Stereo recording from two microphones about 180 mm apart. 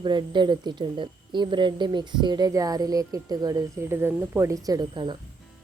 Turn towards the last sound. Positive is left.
turn(degrees=-25)  # may be behind; listen again after turning